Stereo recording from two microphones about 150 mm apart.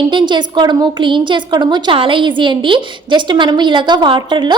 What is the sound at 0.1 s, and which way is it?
A woman's voice, 30° right (ahead or behind).